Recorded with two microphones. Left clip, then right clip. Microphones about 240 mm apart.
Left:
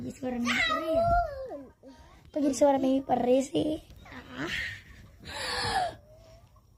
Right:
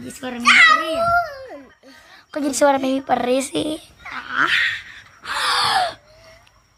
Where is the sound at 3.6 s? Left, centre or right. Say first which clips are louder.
Right 6 dB; right.